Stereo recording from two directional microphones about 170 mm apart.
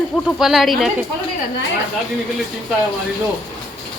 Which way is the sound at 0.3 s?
Centre (ahead or behind).